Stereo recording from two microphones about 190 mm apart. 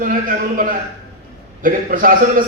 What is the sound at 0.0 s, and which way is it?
A man's voice, 45° right (ahead or behind).